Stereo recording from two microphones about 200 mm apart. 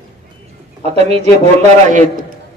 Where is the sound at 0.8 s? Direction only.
30° right (ahead or behind).